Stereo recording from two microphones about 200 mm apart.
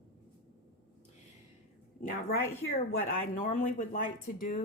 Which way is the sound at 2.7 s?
40° left (ahead or behind).